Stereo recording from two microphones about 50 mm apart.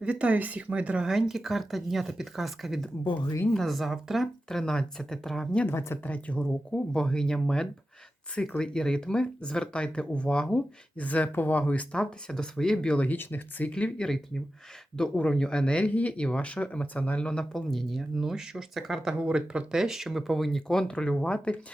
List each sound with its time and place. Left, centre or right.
0.0 s speech: right
1.0 s speech: centre
4.4 s speech: centre
5.6 s speech: left
6.0 s speech: left
11.3 s speech: left
11.9 s speech: centre
13.1 s speech: left
13.7 s speech: left
17.5 s speech: centre
19.2 s speech: centre
20.6 s speech: centre